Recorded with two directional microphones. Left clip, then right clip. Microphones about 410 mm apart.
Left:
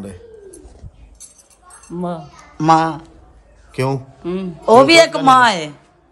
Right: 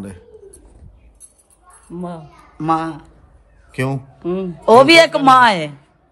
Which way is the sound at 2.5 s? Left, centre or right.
Centre.